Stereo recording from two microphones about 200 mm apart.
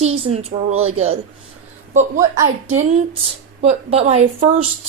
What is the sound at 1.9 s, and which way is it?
Speech, 40° right (ahead or behind).